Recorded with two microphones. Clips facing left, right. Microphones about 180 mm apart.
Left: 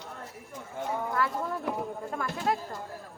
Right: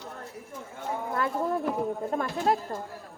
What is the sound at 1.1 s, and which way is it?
Speech, 25° right (ahead or behind).